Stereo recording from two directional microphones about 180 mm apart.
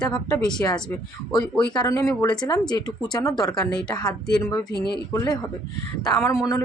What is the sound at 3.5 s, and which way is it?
Speech, 5° left (ahead or behind).